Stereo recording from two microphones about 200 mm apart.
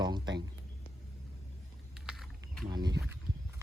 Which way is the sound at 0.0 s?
20° right (ahead or behind).